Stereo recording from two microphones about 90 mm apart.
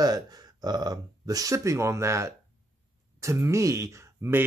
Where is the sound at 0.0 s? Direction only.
45° right (ahead or behind).